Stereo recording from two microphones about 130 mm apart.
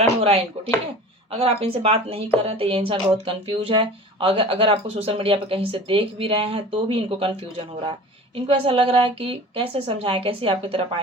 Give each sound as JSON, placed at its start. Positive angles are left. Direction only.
{"t": 0.2, "sound": "a woman's voice", "side_deg": -45}
{"t": 8.4, "sound": "a woman's voice", "side_deg": -45}